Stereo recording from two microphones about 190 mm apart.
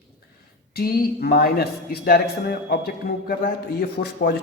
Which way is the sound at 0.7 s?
55° left (ahead or behind).